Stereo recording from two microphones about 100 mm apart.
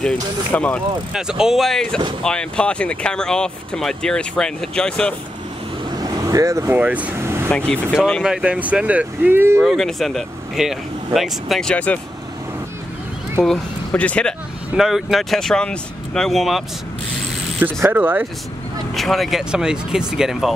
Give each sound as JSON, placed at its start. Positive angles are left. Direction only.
{"t": 0.5, "sound": "speech", "side_deg": 15}
{"t": 1.1, "sound": "speech", "side_deg": -5}
{"t": 5.9, "sound": "vehicle", "side_deg": -35}
{"t": 6.8, "sound": "speech", "side_deg": -15}
{"t": 7.2, "sound": "air conditioning", "side_deg": -25}
{"t": 7.4, "sound": "speech", "side_deg": 10}
{"t": 8.2, "sound": "speech", "side_deg": -5}
{"t": 9.6, "sound": "speech", "side_deg": 5}
{"t": 11.7, "sound": "speech", "side_deg": 15}
{"t": 13.4, "sound": "speech", "side_deg": 10}
{"t": 14.8, "sound": "speech", "side_deg": -5}
{"t": 17.9, "sound": "speech", "side_deg": -20}
{"t": 18.9, "sound": "speech", "side_deg": 0}